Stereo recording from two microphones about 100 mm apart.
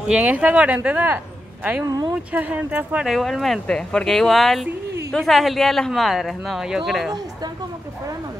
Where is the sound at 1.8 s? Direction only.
40° right (ahead or behind).